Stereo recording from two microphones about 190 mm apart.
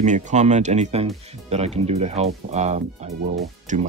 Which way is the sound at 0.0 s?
40° right (ahead or behind).